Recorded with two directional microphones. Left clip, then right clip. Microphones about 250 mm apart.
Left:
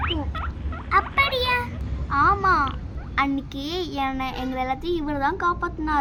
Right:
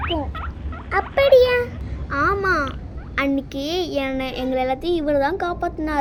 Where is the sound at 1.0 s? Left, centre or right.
Centre.